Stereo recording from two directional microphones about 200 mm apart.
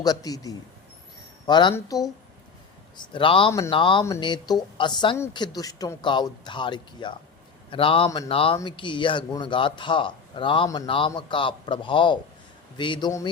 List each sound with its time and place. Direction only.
0.0 s speech: 20° left (ahead or behind)